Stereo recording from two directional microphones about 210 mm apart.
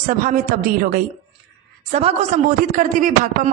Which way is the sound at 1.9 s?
30° right (ahead or behind).